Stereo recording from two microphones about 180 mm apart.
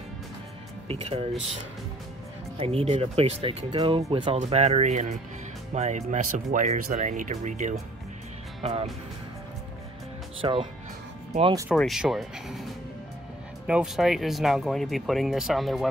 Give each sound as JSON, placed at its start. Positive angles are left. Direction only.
{"t": 0.8, "sound": "speech", "side_deg": -35}
{"t": 2.5, "sound": "speech", "side_deg": -35}
{"t": 10.4, "sound": "speech", "side_deg": -30}
{"t": 11.7, "sound": "speech", "side_deg": 0}